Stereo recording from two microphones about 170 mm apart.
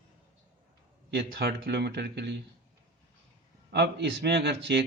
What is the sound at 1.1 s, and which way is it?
Speech, 75° right (ahead or behind).